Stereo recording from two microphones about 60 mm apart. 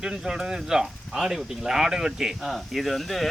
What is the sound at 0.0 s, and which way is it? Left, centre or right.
Speech, centre.